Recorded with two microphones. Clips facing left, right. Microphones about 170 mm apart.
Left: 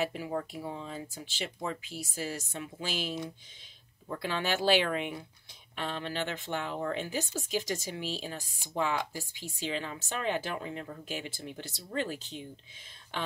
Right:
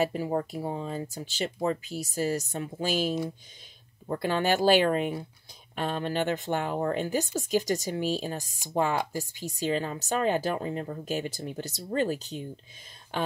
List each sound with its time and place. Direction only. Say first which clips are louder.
0.0 s speech: right 6 dB; 40° right (ahead or behind)